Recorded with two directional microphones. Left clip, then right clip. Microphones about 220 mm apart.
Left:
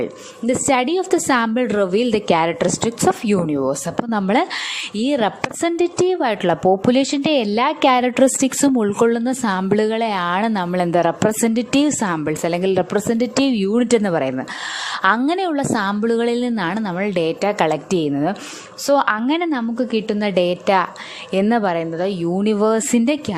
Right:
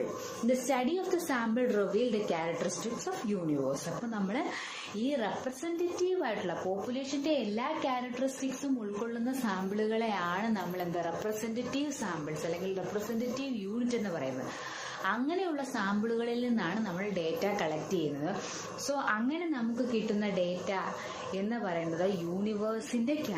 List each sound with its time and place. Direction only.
0.4 s a woman's voice: 40° left (ahead or behind)